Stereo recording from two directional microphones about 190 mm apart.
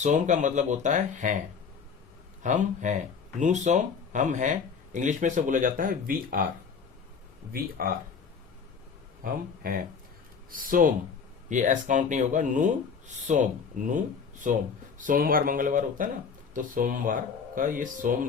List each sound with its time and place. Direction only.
0.0 s speech: 40° right (ahead or behind)
2.4 s speech: 40° right (ahead or behind)
7.5 s speech: 50° right (ahead or behind)
9.2 s speech: 50° right (ahead or behind)